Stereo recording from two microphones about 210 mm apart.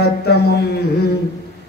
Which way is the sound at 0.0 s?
50° left (ahead or behind).